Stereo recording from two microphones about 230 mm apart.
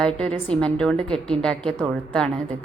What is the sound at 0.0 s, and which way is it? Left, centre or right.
A woman's voice, centre.